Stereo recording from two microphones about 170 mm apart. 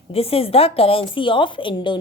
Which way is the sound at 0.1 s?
35° left (ahead or behind).